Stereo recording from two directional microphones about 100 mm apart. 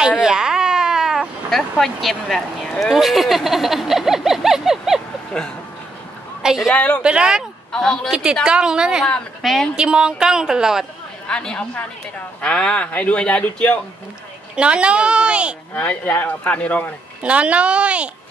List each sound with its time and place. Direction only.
0.2 s baby cry: 5° right (ahead or behind)
6.4 s a woman's voice: 5° right (ahead or behind)
6.7 s speech: 15° left (ahead or behind)
7.0 s a woman's voice: 10° right (ahead or behind)
7.7 s speech: 5° left (ahead or behind)
8.1 s a woman's voice: 10° right (ahead or behind)
11.2 s speech: 10° left (ahead or behind)
14.5 s a woman's voice: 10° right (ahead or behind)
15.7 s speech: 15° left (ahead or behind)
17.2 s a woman's voice: 15° right (ahead or behind)